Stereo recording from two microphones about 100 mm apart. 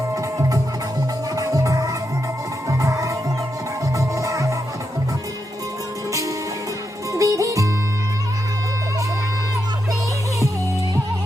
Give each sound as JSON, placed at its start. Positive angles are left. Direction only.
{"t": 1.4, "sound": "music", "side_deg": -35}
{"t": 7.1, "sound": "music", "side_deg": -30}